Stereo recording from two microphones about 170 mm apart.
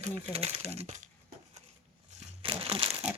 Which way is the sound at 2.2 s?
35° right (ahead or behind).